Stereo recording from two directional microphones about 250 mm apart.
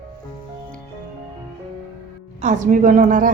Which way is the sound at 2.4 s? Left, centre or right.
Right.